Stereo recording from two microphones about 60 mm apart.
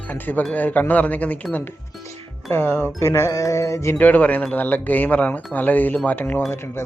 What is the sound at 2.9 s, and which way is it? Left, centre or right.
Music, left.